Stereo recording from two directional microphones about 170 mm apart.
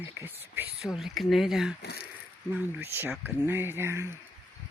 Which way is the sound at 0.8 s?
Centre (ahead or behind).